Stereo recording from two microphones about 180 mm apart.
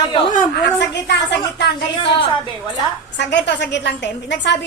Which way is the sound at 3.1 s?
75° left (ahead or behind).